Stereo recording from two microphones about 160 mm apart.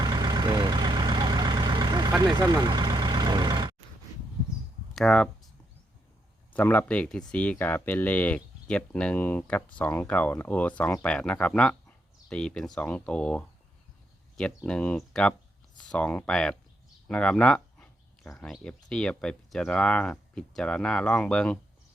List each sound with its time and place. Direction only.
0.0 s vehicle: 25° right (ahead or behind)
4.9 s speech: 5° left (ahead or behind)
6.5 s speech: 10° left (ahead or behind)